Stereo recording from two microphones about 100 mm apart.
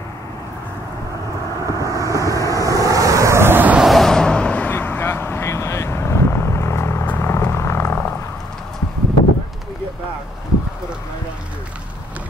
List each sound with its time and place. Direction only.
1.7 s vehicle: 35° right (ahead or behind); by 3.8 s 20° right (ahead or behind)
3.8 s vehicle: centre (ahead or behind); by 7.9 s 25° left (ahead or behind)